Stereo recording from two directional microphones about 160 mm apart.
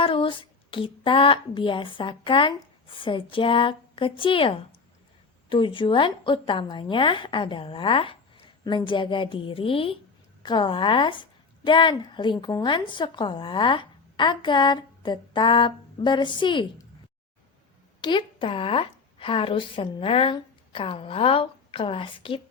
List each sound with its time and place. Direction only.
0.0 s child singing: 35° left (ahead or behind)
5.5 s a woman's voice: 30° left (ahead or behind)
18.0 s a woman's voice: 30° left (ahead or behind)